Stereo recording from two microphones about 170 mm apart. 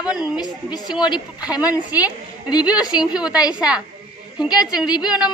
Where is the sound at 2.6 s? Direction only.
5° right (ahead or behind).